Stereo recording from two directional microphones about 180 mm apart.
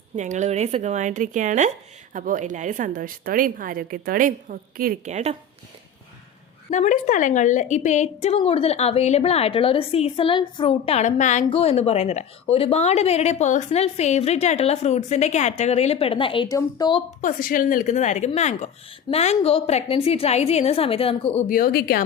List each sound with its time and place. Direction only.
0.2 s a woman's voice: 40° right (ahead or behind)
6.7 s speech: 45° left (ahead or behind)
11.4 s speech: 30° left (ahead or behind)
17.2 s a woman's voice: 50° left (ahead or behind); by 21.4 s 30° left (ahead or behind)
21.4 s a woman's voice: 50° left (ahead or behind)